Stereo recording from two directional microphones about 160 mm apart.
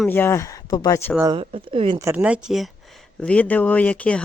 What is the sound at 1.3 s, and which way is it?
Speech, 35° right (ahead or behind).